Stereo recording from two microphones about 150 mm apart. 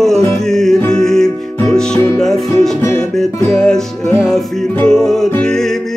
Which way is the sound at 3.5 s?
5° left (ahead or behind).